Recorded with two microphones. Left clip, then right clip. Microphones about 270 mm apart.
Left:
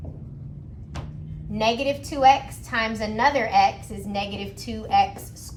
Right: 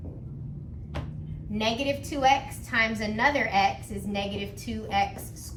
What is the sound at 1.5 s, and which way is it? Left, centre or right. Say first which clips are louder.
A woman's voice: left 5 dB; centre.